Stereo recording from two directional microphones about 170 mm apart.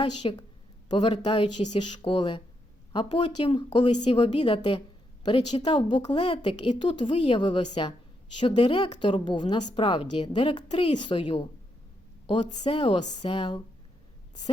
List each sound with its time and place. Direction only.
0.0 s a woman's voice: 30° left (ahead or behind)